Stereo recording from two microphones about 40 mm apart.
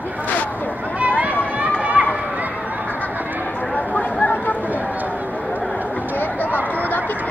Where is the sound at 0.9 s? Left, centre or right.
Right.